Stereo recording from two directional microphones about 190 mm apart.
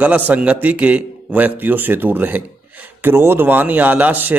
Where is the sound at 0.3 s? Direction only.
5° right (ahead or behind).